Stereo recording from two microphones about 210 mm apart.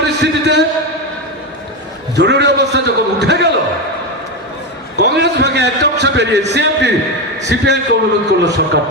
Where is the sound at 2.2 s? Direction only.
55° right (ahead or behind).